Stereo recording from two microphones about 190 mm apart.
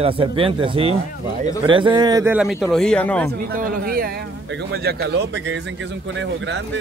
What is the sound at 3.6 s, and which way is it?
A man's voice, 50° right (ahead or behind).